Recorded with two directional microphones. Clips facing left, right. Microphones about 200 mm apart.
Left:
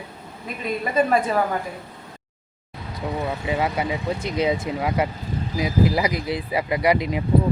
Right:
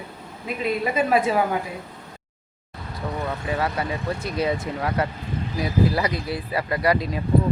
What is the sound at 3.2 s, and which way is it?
Speech, 20° left (ahead or behind).